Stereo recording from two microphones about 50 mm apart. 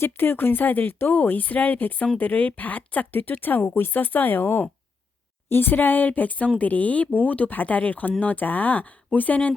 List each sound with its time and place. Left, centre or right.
0.0 s speech: left
3.1 s speech: left